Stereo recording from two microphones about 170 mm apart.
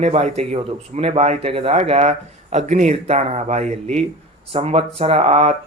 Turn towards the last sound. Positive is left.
turn(degrees=-40)  # may be behind; listen again after turning